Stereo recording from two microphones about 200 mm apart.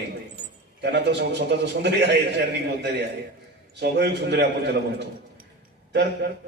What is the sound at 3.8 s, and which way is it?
A man's voice, 55° right (ahead or behind).